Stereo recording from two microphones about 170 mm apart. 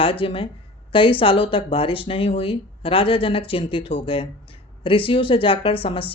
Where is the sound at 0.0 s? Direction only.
30° left (ahead or behind).